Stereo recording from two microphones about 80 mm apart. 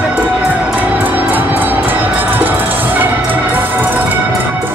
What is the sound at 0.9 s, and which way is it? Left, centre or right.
Music, right.